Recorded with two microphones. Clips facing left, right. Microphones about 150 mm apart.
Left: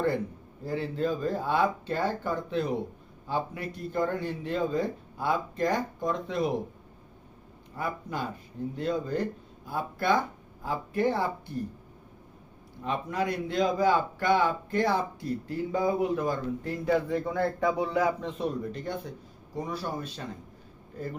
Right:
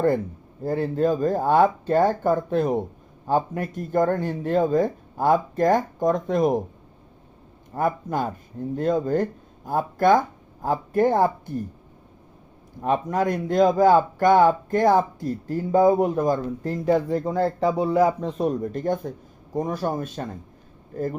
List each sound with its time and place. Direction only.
0.6 s speech: 45° right (ahead or behind)
7.7 s speech: 45° right (ahead or behind)
12.8 s speech: 45° right (ahead or behind)